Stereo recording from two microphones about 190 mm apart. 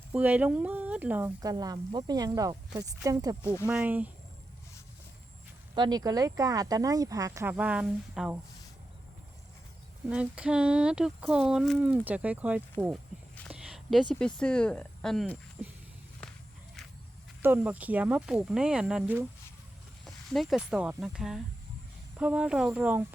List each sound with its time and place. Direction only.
0.1 s speech: 10° right (ahead or behind)
1.4 s speech: 20° right (ahead or behind)
3.7 s speech: 10° right (ahead or behind)
5.7 s speech: 20° right (ahead or behind); by 8.4 s 5° right (ahead or behind)
10.1 s speech: 5° right (ahead or behind)
17.4 s speech: 10° right (ahead or behind)